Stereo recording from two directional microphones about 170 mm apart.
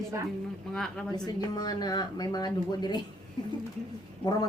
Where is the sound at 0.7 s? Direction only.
5° left (ahead or behind).